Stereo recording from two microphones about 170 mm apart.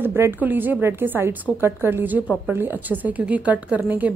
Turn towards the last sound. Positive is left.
turn(degrees=-10)  # may be behind; listen again after turning